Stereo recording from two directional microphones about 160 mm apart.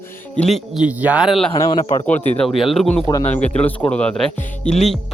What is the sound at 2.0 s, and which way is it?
Speech, 10° left (ahead or behind).